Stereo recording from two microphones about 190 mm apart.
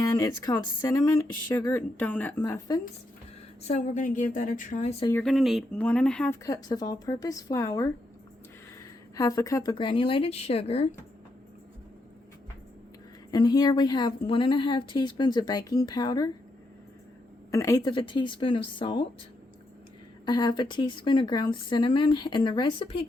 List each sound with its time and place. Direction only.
1.0 s speech: 15° left (ahead or behind)
3.7 s a woman's voice: 40° left (ahead or behind)
5.1 s speech: centre (ahead or behind)
6.4 s speech: 20° left (ahead or behind)
9.1 s a woman's voice: 15° left (ahead or behind)
13.3 s a woman's voice: 20° left (ahead or behind)
17.5 s a woman's voice: 15° left (ahead or behind)
20.2 s a woman's voice: 20° left (ahead or behind)